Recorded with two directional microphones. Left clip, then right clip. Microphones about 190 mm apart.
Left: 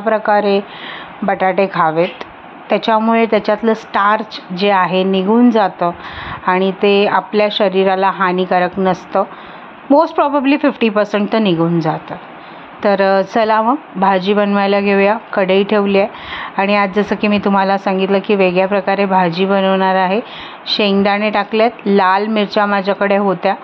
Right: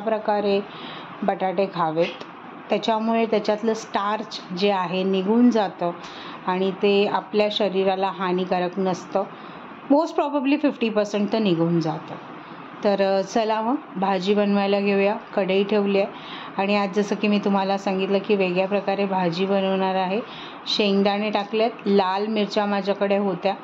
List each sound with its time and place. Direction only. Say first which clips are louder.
0.0 s a woman's voice: left 9 dB; 15° left (ahead or behind)